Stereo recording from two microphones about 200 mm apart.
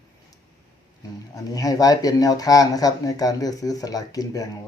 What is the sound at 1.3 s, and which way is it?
Speech, 20° left (ahead or behind).